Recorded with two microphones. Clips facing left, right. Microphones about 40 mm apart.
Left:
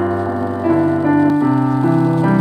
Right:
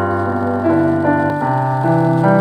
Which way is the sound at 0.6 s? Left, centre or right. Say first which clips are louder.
Even; centre.